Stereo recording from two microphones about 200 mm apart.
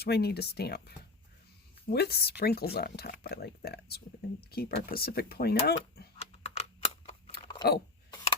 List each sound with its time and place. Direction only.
0.0 s speech: 55° left (ahead or behind)
6.1 s typing: 30° left (ahead or behind)